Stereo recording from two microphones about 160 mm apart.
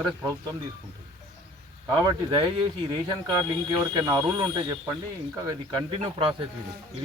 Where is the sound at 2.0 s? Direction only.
25° right (ahead or behind).